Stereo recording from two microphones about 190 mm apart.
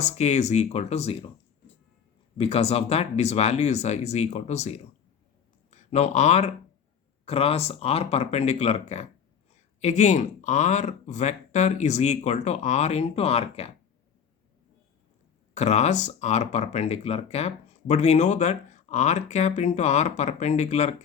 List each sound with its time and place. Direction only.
0.0 s speech: 35° left (ahead or behind)
2.4 s speech: 30° left (ahead or behind)
15.5 s speech: 35° left (ahead or behind)